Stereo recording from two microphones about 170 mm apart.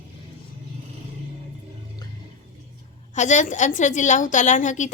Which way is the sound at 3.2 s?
45° left (ahead or behind).